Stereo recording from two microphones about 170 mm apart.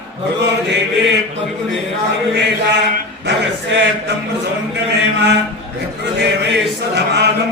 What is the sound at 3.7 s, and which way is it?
Speech, 90° right.